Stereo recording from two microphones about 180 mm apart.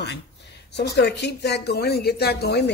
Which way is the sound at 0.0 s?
70° left (ahead or behind).